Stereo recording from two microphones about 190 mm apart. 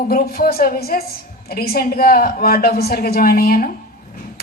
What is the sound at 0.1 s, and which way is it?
A woman's voice, 50° left (ahead or behind).